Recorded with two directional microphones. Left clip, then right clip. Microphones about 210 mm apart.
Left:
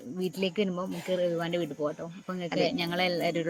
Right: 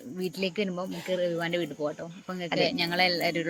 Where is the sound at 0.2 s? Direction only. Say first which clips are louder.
Even; 25° left (ahead or behind).